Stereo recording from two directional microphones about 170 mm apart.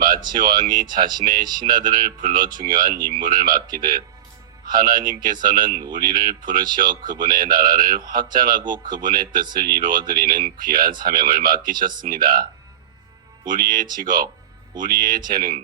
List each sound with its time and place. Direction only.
0.3 s speech: 55° right (ahead or behind)
13.5 s speech: 55° right (ahead or behind)